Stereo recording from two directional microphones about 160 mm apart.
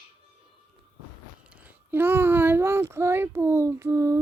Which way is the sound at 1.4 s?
10° right (ahead or behind).